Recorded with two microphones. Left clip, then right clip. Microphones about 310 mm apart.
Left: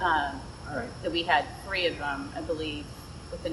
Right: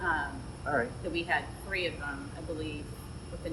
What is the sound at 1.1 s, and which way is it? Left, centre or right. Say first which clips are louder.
Speech: left 8 dB; centre.